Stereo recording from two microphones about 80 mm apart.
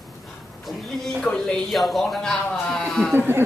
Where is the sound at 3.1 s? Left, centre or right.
Right.